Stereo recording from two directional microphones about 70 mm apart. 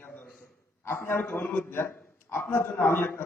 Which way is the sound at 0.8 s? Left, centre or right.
Left.